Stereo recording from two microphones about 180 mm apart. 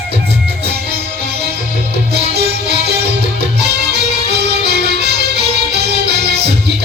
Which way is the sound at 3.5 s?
65° right (ahead or behind).